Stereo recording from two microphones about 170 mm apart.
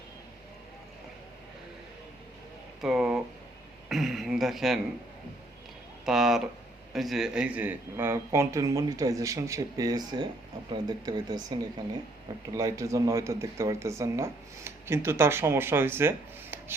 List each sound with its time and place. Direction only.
2.8 s speech: 5° right (ahead or behind)
6.1 s speech: centre (ahead or behind); by 11.5 s 20° right (ahead or behind)
12.5 s speech: 20° right (ahead or behind)